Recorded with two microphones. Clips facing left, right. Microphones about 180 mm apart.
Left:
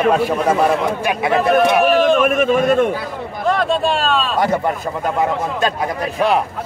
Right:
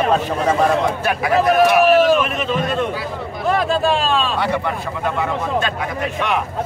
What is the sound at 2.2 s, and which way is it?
Speech, 50° left (ahead or behind).